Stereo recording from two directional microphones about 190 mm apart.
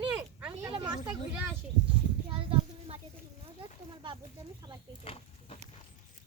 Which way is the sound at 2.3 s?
30° right (ahead or behind).